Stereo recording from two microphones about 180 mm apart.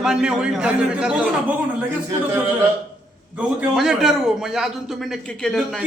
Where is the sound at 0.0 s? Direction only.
5° right (ahead or behind).